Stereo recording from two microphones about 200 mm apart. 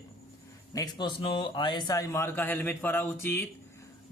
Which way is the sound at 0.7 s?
20° left (ahead or behind).